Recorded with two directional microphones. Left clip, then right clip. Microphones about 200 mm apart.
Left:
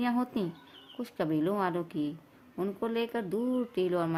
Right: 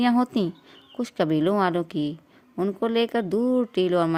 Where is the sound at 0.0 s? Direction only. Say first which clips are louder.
Right 9 dB; 40° right (ahead or behind).